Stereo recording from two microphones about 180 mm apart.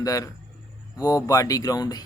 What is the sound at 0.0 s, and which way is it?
A man's voice, 20° left (ahead or behind).